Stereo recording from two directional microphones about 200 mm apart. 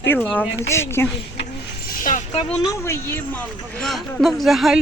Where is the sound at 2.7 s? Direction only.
15° left (ahead or behind).